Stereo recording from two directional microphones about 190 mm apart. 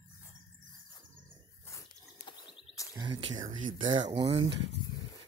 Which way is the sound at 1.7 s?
15° left (ahead or behind).